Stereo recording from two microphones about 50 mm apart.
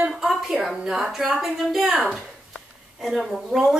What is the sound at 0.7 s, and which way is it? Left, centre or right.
A woman's voice, centre.